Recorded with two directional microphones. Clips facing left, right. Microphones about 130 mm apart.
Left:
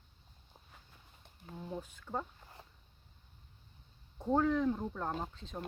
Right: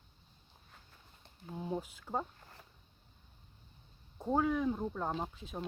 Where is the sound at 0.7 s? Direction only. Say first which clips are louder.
Right 2 dB; 5° left (ahead or behind).